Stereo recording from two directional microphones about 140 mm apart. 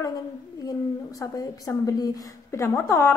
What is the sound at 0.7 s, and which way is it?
A woman's voice, 25° left (ahead or behind).